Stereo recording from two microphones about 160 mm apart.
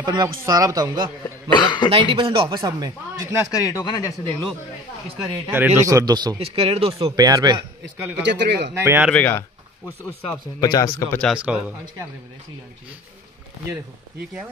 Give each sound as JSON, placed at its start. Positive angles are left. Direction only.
{"t": 0.0, "sound": "a man's voice", "side_deg": -25}
{"t": 1.5, "sound": "speech", "side_deg": 30}
{"t": 1.9, "sound": "speech", "side_deg": -35}
{"t": 3.5, "sound": "speech", "side_deg": 20}
{"t": 5.2, "sound": "a man's voice", "side_deg": -15}
{"t": 6.5, "sound": "speech", "side_deg": -40}
{"t": 7.0, "sound": "a man's voice", "side_deg": -25}
{"t": 8.2, "sound": "speech", "side_deg": -90}
{"t": 8.7, "sound": "speech", "side_deg": -15}
{"t": 9.1, "sound": "speech", "side_deg": 10}
{"t": 10.6, "sound": "speech", "side_deg": 25}
{"t": 11.3, "sound": "speech", "side_deg": -5}